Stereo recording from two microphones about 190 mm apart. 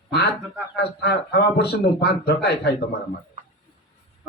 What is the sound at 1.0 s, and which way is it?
A man's voice, 60° left (ahead or behind).